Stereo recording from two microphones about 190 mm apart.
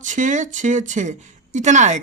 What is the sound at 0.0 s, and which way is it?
A woman's voice, 40° right (ahead or behind).